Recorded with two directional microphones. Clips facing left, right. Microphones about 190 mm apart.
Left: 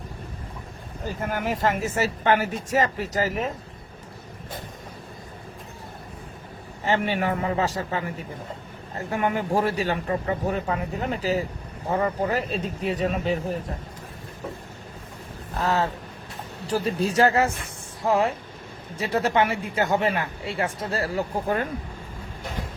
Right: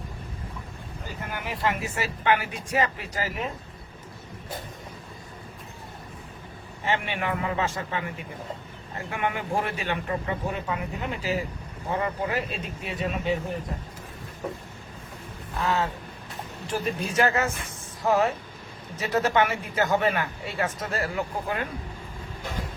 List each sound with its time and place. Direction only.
1.2 s speech: 45° left (ahead or behind)
6.8 s a man's voice: 40° left (ahead or behind)
15.6 s a man's voice: 40° left (ahead or behind)
21.4 s speech: 45° left (ahead or behind)